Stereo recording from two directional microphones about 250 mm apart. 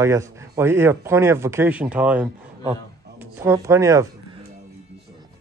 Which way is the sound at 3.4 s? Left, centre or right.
Centre.